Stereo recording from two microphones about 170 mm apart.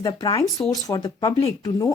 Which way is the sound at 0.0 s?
20° left (ahead or behind).